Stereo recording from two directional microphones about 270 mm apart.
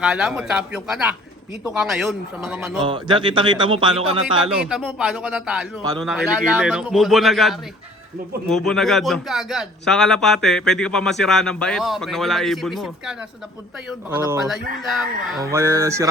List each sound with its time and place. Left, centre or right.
0.0 s a man's voice: centre
2.8 s speech: centre
4.5 s a man's voice: centre
14.2 s a man's voice: centre